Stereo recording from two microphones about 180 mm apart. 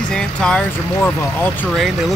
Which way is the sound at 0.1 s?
5° left (ahead or behind).